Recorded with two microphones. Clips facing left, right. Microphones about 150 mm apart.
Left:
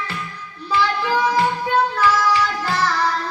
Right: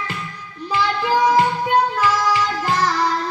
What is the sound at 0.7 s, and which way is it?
Music, 15° right (ahead or behind).